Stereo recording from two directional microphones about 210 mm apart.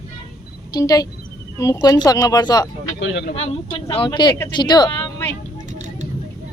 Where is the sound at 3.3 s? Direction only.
30° left (ahead or behind).